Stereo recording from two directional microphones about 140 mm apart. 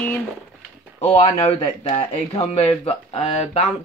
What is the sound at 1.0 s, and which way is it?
Speech, 45° left (ahead or behind).